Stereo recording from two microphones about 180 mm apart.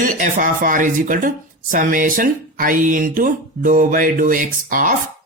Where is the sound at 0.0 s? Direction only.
45° right (ahead or behind).